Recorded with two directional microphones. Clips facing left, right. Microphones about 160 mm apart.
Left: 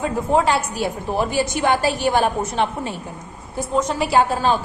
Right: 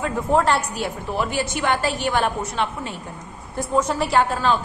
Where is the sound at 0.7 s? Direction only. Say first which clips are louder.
Left 3 dB; 35° left (ahead or behind).